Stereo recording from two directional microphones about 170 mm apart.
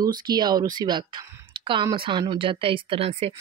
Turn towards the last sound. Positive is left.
turn(degrees=-35)  # may be behind; listen again after turning